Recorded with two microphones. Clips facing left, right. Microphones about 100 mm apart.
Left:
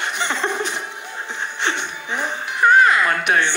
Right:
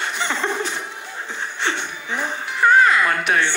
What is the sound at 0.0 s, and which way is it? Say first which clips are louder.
Chuckle: left 1 dB; 20° left (ahead or behind).